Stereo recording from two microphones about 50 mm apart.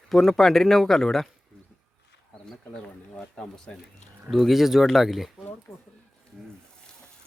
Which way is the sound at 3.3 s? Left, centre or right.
Centre.